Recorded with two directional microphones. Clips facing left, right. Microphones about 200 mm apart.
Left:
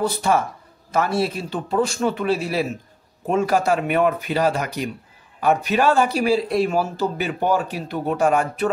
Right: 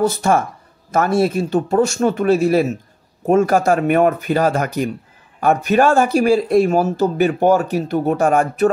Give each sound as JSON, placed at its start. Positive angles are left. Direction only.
{"t": 0.0, "sound": "speech", "side_deg": -45}